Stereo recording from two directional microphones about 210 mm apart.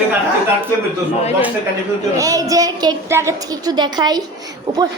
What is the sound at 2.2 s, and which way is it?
A woman's voice, 15° right (ahead or behind).